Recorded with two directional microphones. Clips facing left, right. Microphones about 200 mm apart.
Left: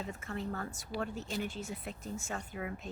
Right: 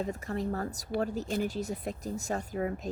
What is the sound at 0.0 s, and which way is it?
Speech, 40° right (ahead or behind).